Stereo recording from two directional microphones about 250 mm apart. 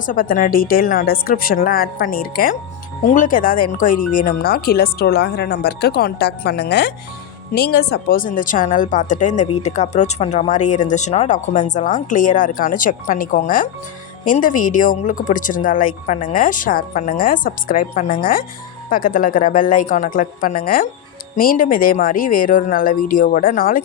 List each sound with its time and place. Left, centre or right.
0.0 s a woman's voice: left